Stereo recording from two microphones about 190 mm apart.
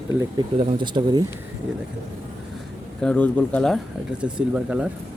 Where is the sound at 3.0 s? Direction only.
5° left (ahead or behind).